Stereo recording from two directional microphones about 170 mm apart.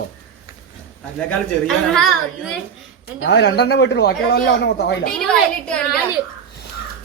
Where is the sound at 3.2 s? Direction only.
90° left.